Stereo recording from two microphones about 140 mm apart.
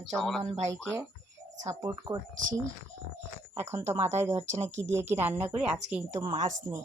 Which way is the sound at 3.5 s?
20° right (ahead or behind).